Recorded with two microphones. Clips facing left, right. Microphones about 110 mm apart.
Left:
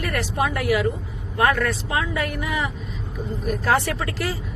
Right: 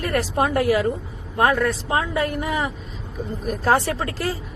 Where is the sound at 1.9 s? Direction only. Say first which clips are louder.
Right 3 dB; 30° right (ahead or behind).